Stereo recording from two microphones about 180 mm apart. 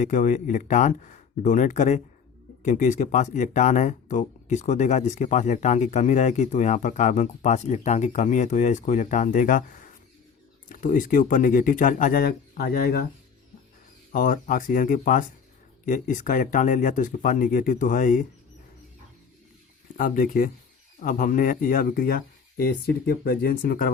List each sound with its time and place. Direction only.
0.0 s speech: 45° left (ahead or behind)
10.7 s speech: 45° left (ahead or behind)
14.1 s speech: 50° left (ahead or behind)
20.0 s speech: 50° left (ahead or behind)